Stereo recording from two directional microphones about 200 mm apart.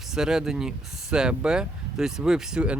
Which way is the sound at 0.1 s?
5° right (ahead or behind).